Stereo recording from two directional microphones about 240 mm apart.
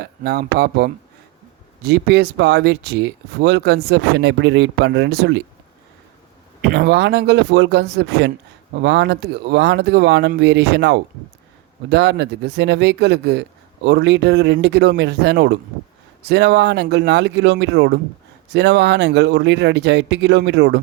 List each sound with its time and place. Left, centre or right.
0.0 s speech: right
6.6 s speech: right